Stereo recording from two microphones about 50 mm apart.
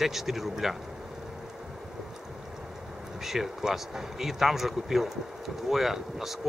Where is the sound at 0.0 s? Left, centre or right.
Centre.